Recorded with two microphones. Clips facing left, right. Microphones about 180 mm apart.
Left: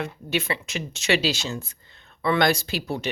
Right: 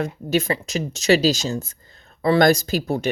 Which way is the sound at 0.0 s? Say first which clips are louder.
Right 6 dB; 40° right (ahead or behind).